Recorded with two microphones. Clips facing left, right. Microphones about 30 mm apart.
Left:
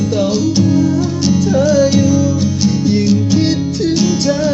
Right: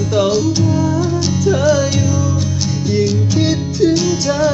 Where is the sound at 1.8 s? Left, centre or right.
Left.